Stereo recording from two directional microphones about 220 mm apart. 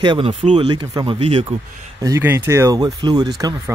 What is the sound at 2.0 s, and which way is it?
Speech, 10° right (ahead or behind).